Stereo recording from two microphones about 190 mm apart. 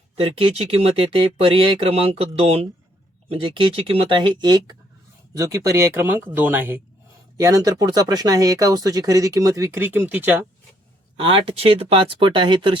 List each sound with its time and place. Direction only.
0.2 s speech: 30° right (ahead or behind); by 10.4 s 10° right (ahead or behind)
11.2 s speech: 30° right (ahead or behind)